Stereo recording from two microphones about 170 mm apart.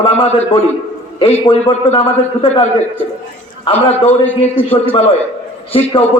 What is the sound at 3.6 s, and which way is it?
Speech, 35° left (ahead or behind).